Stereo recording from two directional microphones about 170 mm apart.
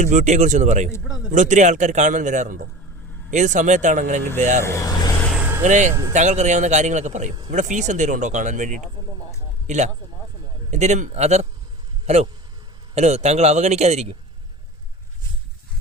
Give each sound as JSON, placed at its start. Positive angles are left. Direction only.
{"t": 0.0, "sound": "a man's voice", "side_deg": -45}
{"t": 4.6, "sound": "speech", "side_deg": 15}
{"t": 5.4, "sound": "vehicle", "side_deg": -10}
{"t": 5.6, "sound": "a man's voice", "side_deg": -45}
{"t": 5.9, "sound": "speech", "side_deg": -15}
{"t": 6.1, "sound": "a man's voice", "side_deg": -45}